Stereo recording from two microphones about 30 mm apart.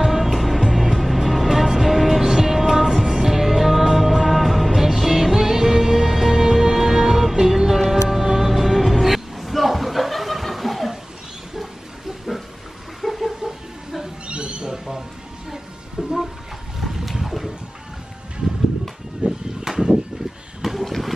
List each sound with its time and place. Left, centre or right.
0.0 s music: centre
6.4 s music: centre
13.0 s a sound: centre
14.2 s owl: right
15.5 s music: centre
16.8 s boat: centre
19.2 s a sound: right
20.6 s vehicle: centre